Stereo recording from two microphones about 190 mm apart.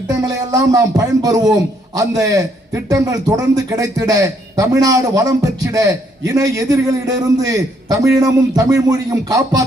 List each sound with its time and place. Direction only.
0.1 s a man's voice: 15° right (ahead or behind)